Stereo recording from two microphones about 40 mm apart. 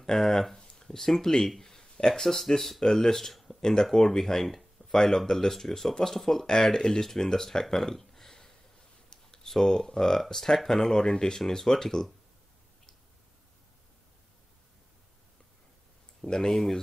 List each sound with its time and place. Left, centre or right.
0.0 s speech: centre
7.7 s a sound: centre
9.5 s speech: centre
16.3 s speech: centre